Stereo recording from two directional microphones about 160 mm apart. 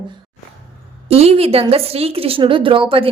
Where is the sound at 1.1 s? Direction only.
40° right (ahead or behind).